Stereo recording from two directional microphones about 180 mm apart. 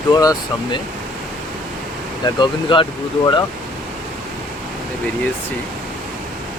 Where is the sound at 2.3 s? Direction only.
25° left (ahead or behind).